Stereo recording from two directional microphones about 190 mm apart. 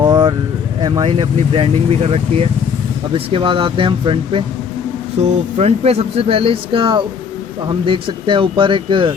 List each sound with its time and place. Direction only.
0.0 s vehicle: 25° right (ahead or behind)
0.8 s speech: 25° right (ahead or behind)
5.5 s speech: 35° right (ahead or behind)